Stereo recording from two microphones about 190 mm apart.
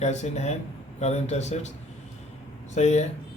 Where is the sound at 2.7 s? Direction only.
35° left (ahead or behind).